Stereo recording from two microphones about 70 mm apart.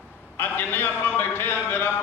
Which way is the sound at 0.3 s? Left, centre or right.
Left.